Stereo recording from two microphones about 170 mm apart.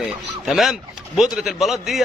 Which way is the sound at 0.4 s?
Centre (ahead or behind).